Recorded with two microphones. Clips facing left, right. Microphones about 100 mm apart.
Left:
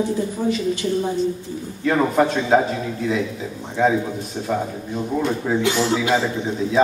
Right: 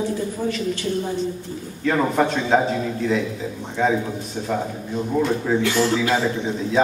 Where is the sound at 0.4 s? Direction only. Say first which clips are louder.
Left 4 dB; 15° left (ahead or behind).